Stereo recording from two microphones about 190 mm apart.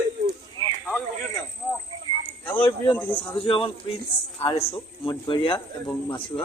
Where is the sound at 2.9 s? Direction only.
10° left (ahead or behind).